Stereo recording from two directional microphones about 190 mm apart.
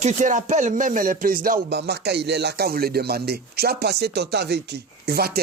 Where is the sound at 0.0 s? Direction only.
40° right (ahead or behind).